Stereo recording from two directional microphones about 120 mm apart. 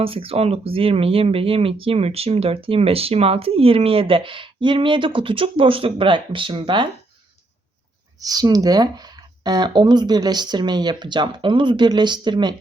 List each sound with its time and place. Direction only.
0.0 s speech: 50° right (ahead or behind)
8.2 s speech: 30° right (ahead or behind)